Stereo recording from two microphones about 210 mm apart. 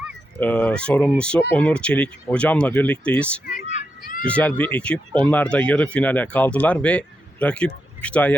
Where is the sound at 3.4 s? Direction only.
35° left (ahead or behind).